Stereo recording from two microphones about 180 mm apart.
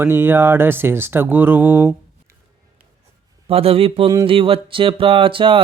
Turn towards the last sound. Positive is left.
turn(degrees=-30)  # may be behind; listen again after turning